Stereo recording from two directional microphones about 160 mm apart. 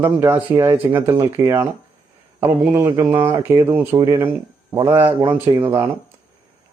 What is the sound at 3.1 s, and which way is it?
Speech, 15° right (ahead or behind).